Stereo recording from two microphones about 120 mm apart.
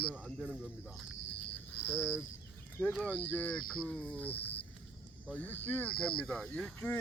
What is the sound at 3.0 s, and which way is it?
Speech, 10° left (ahead or behind).